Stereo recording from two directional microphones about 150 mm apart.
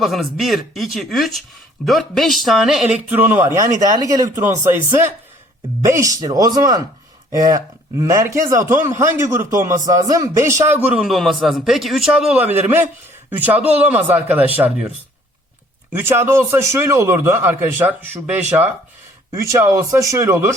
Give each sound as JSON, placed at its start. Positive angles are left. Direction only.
{"t": 0.0, "sound": "a man's voice", "side_deg": 0}
{"t": 10.8, "sound": "a man's voice", "side_deg": -5}